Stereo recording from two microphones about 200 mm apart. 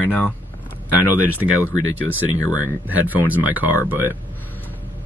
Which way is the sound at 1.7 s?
75° right (ahead or behind).